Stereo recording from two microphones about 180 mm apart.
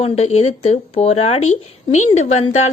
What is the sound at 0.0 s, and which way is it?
A woman's voice, 35° left (ahead or behind).